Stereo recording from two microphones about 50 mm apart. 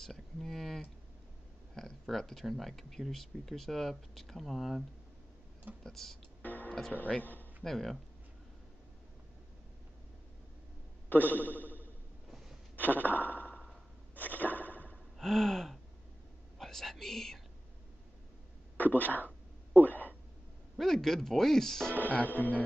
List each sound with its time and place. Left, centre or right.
0.0 s speech: centre
5.9 s speech: centre
6.4 s music: left
7.1 s speech: left
7.6 s speech: centre
11.1 s speech: left
12.7 s a sound: left
15.1 s gasp: centre
16.5 s speech: centre
18.8 s a sound: left
20.7 s speech: centre
21.9 s speech: left